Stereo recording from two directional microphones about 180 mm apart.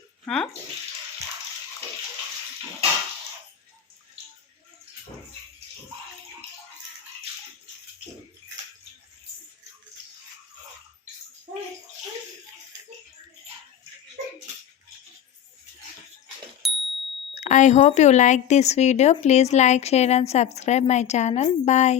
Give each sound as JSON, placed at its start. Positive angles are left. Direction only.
{"t": 0.3, "sound": "speech", "side_deg": 5}
{"t": 16.6, "sound": "ding", "side_deg": 0}
{"t": 17.3, "sound": "speech", "side_deg": 45}